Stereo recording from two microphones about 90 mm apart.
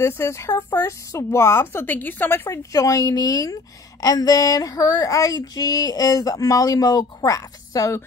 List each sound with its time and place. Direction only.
0.0 s a woman's voice: 30° left (ahead or behind)
2.7 s female singing: 40° left (ahead or behind)